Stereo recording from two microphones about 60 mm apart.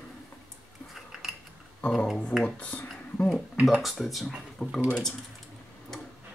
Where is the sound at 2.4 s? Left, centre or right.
Left.